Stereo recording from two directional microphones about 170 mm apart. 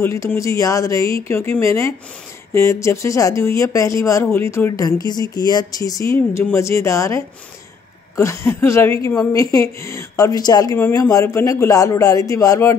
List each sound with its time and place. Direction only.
0.0 s a woman's voice: 15° left (ahead or behind)